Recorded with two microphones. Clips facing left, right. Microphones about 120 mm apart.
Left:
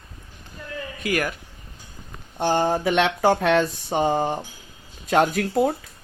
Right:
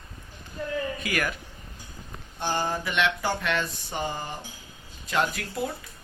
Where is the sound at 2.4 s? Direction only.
60° left (ahead or behind).